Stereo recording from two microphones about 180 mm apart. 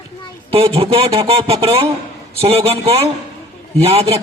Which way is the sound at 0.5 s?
30° right (ahead or behind).